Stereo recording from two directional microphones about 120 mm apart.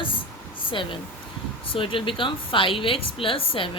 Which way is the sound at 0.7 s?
45° left (ahead or behind).